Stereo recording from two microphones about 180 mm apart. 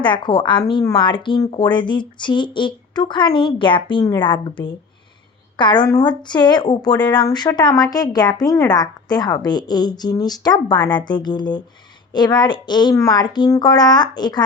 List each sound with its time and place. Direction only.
0.0 s speech: 25° left (ahead or behind)